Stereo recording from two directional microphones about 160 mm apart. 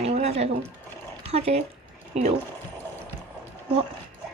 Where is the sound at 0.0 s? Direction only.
40° right (ahead or behind).